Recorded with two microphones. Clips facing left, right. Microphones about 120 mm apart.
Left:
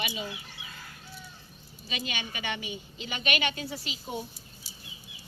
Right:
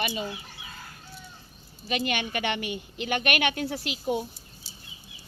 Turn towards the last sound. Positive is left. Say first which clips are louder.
# right 8 dB
turn(degrees=-60)  # may be behind; listen again after turning